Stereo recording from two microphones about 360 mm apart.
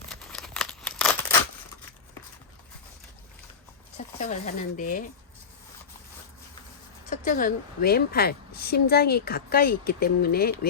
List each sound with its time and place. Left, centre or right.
0.1 s tearing: centre
3.9 s a woman's voice: centre
7.1 s a woman's voice: left